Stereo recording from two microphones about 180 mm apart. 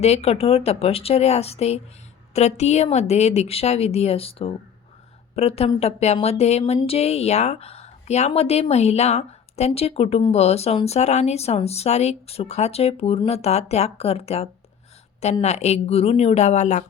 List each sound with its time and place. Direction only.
0.0 s a woman's voice: 35° left (ahead or behind)